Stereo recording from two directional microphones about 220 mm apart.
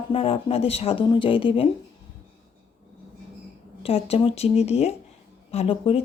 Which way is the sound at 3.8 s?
25° left (ahead or behind).